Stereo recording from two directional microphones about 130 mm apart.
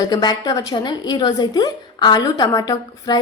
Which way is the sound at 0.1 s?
30° left (ahead or behind).